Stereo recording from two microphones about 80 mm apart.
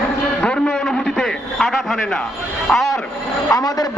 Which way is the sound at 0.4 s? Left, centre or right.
Centre.